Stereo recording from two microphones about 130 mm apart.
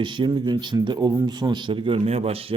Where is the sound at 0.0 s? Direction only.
35° right (ahead or behind).